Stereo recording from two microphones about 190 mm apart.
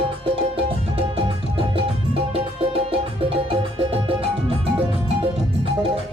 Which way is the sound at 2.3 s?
30° right (ahead or behind).